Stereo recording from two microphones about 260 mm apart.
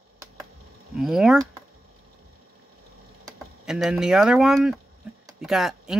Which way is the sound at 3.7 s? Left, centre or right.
Centre.